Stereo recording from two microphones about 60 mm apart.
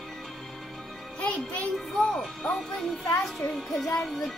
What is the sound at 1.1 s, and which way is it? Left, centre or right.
Music, centre.